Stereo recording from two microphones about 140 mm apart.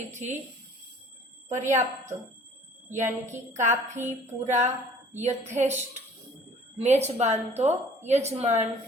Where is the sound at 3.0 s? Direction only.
20° right (ahead or behind).